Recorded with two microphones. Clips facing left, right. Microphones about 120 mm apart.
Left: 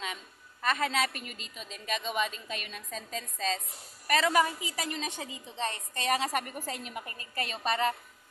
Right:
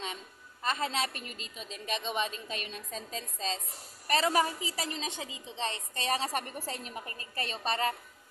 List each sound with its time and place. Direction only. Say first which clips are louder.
0.0 s a woman's voice: left 1 dB; 30° right (ahead or behind)